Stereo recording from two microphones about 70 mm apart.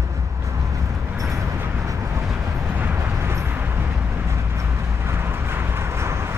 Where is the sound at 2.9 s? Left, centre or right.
Right.